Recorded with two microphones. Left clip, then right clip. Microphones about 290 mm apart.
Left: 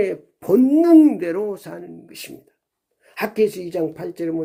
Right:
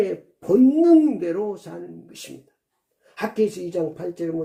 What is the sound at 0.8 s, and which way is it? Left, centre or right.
Speech, left.